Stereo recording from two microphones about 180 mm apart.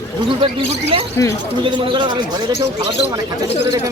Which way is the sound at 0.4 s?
30° right (ahead or behind).